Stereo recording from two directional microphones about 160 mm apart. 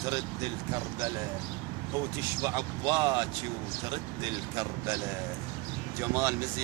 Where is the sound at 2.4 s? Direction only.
25° right (ahead or behind).